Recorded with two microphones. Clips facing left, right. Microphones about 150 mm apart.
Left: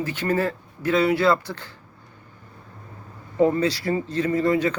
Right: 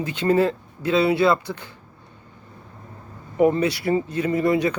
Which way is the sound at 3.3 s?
15° right (ahead or behind).